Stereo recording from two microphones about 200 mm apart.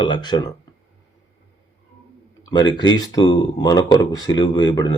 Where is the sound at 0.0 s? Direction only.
20° left (ahead or behind).